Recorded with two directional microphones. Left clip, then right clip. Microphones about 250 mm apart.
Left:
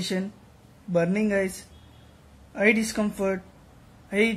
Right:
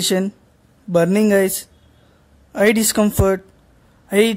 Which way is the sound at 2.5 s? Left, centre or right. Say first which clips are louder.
Right 7 dB; right.